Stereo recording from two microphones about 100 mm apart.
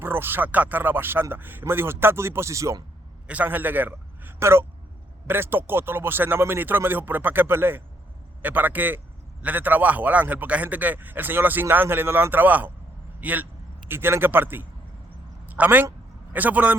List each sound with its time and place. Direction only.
0.0 s speech: 20° right (ahead or behind)
3.2 s a man's voice: 15° right (ahead or behind)